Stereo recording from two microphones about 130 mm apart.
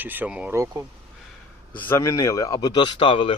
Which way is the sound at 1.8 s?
20° left (ahead or behind).